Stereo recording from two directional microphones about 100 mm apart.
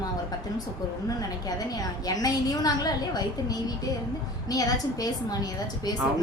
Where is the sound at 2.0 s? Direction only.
40° left (ahead or behind).